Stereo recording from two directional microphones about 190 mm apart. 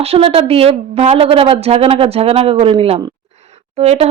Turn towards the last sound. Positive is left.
turn(degrees=-35)  # may be behind; listen again after turning